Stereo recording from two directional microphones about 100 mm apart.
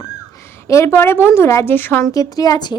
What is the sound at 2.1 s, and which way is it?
Speech, 40° left (ahead or behind).